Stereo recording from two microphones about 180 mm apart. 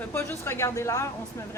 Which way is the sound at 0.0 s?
10° left (ahead or behind).